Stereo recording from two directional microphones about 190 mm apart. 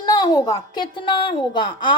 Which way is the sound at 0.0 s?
20° left (ahead or behind).